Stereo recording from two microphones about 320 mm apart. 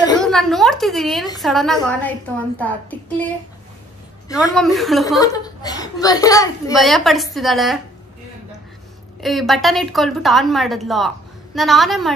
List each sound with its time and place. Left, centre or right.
0.2 s a woman's voice: centre
4.6 s a woman's voice: centre
5.2 s a woman's voice: centre
6.8 s a woman's voice: centre
9.2 s a woman's voice: centre